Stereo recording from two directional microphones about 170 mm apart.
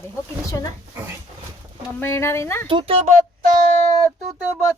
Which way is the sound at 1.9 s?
15° left (ahead or behind).